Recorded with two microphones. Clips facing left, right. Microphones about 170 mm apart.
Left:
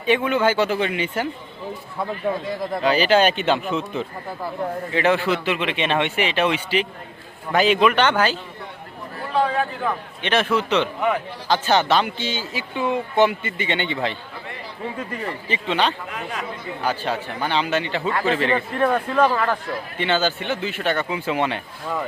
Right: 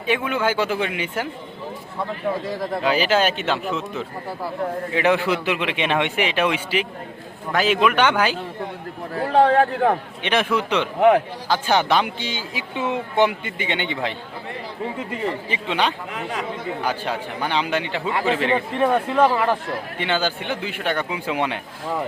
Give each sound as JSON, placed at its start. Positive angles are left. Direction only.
{"t": 0.0, "sound": "a man's voice", "side_deg": -10}
{"t": 2.8, "sound": "speech", "side_deg": -5}
{"t": 4.9, "sound": "a man's voice", "side_deg": -15}
{"t": 9.1, "sound": "a sound", "side_deg": -65}
{"t": 10.2, "sound": "a man's voice", "side_deg": -15}